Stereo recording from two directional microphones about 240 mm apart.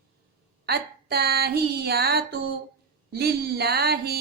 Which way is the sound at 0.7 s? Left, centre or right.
Right.